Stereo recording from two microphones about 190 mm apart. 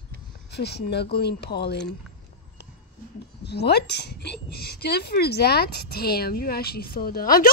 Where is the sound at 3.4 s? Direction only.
60° left (ahead or behind).